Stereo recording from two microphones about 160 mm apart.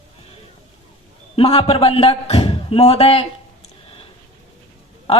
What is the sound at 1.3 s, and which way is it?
A woman's voice, 35° left (ahead or behind).